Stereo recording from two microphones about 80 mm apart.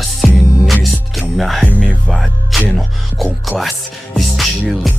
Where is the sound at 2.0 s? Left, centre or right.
Centre.